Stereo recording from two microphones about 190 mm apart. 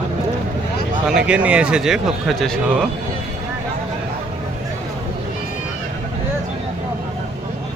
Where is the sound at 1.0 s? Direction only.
5° right (ahead or behind).